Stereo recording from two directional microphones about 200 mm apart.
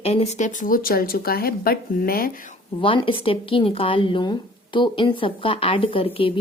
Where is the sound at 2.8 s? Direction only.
25° left (ahead or behind).